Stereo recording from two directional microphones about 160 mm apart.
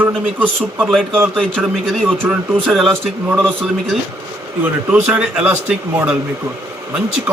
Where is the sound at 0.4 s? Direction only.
Centre (ahead or behind).